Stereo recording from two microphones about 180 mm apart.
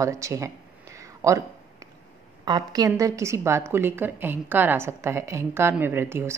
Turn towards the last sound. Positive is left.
turn(degrees=-15)  # may be behind; listen again after turning